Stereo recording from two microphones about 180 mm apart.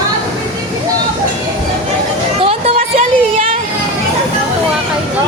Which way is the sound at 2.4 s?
30° right (ahead or behind).